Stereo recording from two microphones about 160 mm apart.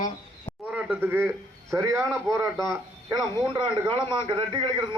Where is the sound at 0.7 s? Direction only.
10° right (ahead or behind).